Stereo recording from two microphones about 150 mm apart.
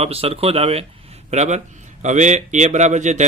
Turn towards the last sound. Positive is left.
turn(degrees=-50)  # may be behind; listen again after turning